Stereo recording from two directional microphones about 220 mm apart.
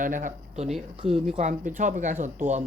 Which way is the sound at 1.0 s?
25° right (ahead or behind).